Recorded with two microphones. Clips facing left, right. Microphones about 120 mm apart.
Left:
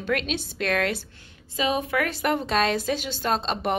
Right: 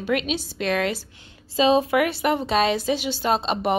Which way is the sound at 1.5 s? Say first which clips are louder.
Right 7 dB; 25° right (ahead or behind).